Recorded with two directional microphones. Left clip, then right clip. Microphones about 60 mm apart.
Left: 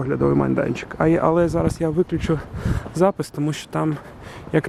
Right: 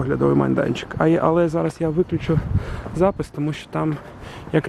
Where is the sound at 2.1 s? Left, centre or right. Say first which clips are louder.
Even; left.